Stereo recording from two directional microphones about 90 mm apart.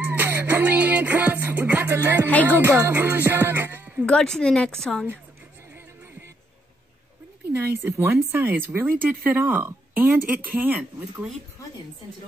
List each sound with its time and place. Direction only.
0.0 s music: 20° right (ahead or behind)
2.4 s speech: 25° right (ahead or behind)
4.0 s a woman's voice: 10° left (ahead or behind)
7.5 s speech: 30° right (ahead or behind)